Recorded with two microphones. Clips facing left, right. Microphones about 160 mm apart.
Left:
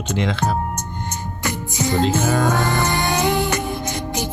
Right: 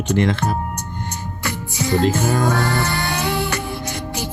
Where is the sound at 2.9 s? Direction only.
20° left (ahead or behind).